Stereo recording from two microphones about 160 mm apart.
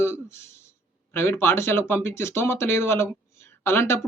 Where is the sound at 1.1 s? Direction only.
15° left (ahead or behind).